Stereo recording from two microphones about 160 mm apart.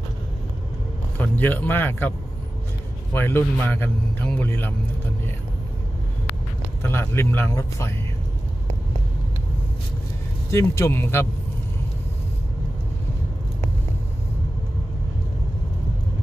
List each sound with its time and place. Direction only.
1.1 s a man's voice: 10° left (ahead or behind)
6.8 s a man's voice: 15° left (ahead or behind)
10.5 s a man's voice: 20° left (ahead or behind)